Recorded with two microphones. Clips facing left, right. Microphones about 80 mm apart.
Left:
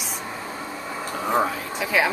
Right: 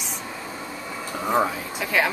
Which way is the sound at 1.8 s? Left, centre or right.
Centre.